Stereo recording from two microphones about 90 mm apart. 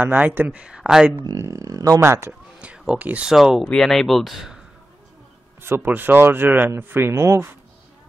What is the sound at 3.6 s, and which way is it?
Speech, 5° left (ahead or behind).